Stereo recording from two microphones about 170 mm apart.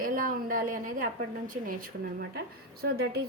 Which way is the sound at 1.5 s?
55° right (ahead or behind).